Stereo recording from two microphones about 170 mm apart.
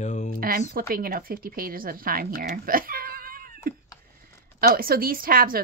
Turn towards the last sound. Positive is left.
turn(degrees=-55)  # may be behind; listen again after turning